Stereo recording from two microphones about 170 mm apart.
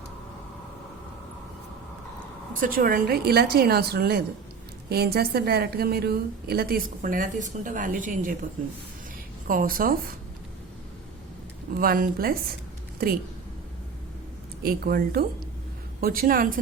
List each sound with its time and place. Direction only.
2.6 s a woman's voice: 55° right (ahead or behind)
9.5 s a woman's voice: 55° right (ahead or behind)
11.8 s a woman's voice: 60° right (ahead or behind)
14.6 s a woman's voice: 65° right (ahead or behind)